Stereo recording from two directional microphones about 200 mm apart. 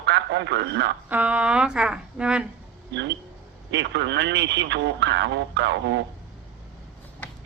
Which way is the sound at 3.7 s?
60° right (ahead or behind).